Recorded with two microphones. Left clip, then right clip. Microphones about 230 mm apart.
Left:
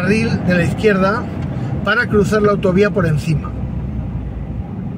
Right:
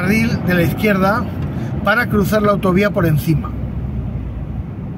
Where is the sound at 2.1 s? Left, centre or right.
Centre.